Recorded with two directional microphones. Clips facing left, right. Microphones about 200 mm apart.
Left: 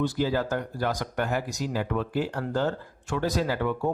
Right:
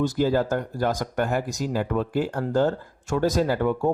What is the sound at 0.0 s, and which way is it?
A man's voice, 45° right (ahead or behind).